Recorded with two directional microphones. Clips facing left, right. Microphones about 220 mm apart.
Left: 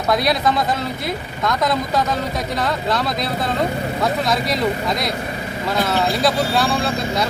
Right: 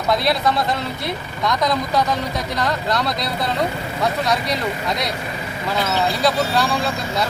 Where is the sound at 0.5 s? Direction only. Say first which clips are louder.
Left 1 dB; centre (ahead or behind).